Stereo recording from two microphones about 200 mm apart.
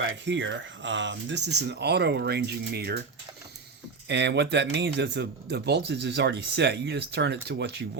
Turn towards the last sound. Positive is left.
turn(degrees=-55)  # may be behind; listen again after turning